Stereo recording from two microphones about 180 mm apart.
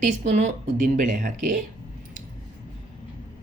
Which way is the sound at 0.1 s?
40° right (ahead or behind).